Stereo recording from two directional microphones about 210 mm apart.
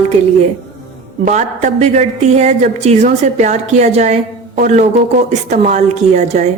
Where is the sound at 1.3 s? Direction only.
35° right (ahead or behind).